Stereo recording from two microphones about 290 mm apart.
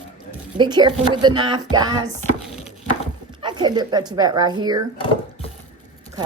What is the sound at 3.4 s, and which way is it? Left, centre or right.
Speech, centre.